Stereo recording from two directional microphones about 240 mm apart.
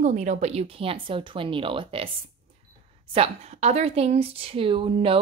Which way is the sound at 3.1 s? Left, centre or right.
Right.